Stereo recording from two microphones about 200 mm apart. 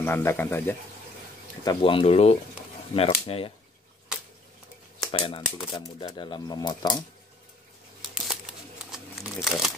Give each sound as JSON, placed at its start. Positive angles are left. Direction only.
{"t": 0.0, "sound": "speech", "side_deg": 10}
{"t": 1.6, "sound": "speech", "side_deg": 20}
{"t": 5.1, "sound": "speech", "side_deg": 25}
{"t": 8.0, "sound": "crumpling", "side_deg": 0}